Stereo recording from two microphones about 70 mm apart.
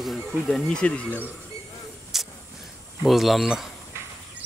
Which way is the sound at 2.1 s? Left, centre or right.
Centre.